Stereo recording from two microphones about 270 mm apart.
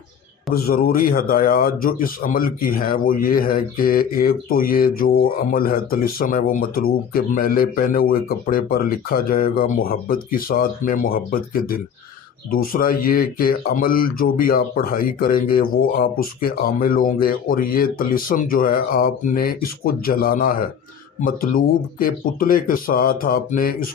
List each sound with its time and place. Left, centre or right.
0.7 s speech: left